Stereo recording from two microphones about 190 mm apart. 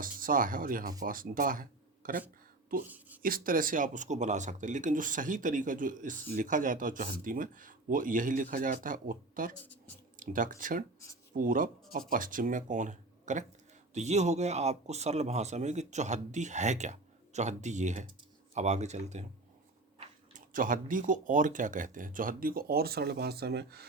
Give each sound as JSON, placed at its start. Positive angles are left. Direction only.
{"t": 0.0, "sound": "speech", "side_deg": -45}
{"t": 2.8, "sound": "speech", "side_deg": -10}
{"t": 3.2, "sound": "speech", "side_deg": -50}
{"t": 20.3, "sound": "speech", "side_deg": -45}